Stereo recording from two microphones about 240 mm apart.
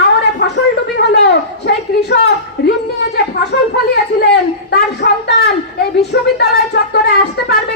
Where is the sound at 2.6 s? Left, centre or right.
Left.